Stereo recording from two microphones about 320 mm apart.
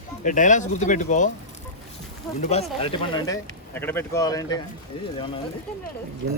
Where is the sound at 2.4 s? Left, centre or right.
Centre.